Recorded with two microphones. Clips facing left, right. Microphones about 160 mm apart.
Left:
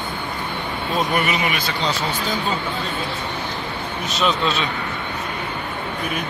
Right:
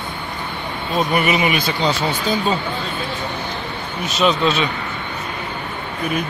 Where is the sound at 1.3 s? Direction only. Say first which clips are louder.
Right 4 dB; 20° right (ahead or behind).